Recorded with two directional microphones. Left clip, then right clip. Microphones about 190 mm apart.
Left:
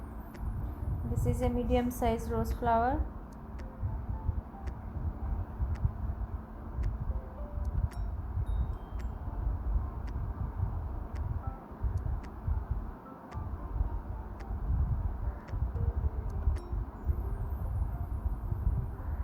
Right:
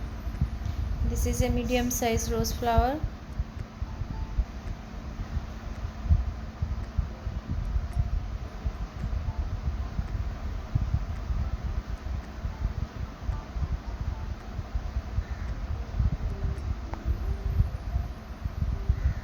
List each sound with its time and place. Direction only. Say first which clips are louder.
1.2 s a woman's voice: right 3 dB; 5° left (ahead or behind)